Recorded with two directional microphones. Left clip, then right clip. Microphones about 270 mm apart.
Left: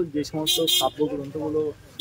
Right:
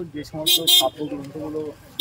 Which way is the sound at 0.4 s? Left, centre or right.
Right.